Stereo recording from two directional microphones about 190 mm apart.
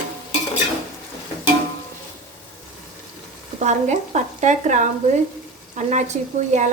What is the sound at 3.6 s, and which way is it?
Speech, 40° right (ahead or behind).